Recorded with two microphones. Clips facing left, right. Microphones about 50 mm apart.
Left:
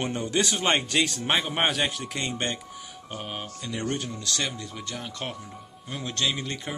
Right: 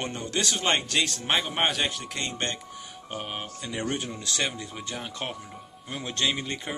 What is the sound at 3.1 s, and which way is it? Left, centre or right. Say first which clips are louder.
A man's voice: right 1 dB; centre.